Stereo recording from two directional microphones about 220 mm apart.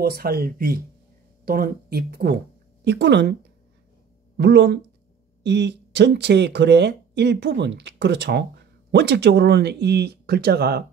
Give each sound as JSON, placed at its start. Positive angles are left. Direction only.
{"t": 0.0, "sound": "speech", "side_deg": -45}
{"t": 4.4, "sound": "speech", "side_deg": -50}